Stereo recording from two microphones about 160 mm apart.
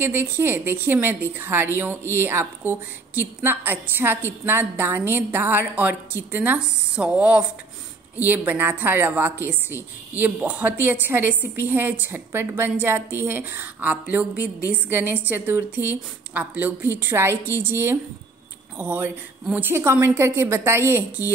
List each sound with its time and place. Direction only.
0.0 s a woman's voice: 15° right (ahead or behind)